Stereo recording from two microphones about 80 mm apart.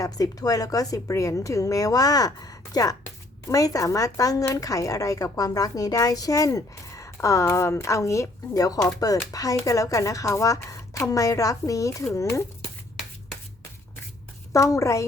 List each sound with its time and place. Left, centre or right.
0.0 s a woman's voice: left
14.5 s a woman's voice: left